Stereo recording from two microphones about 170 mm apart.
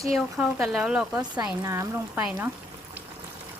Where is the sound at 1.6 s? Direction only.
20° right (ahead or behind).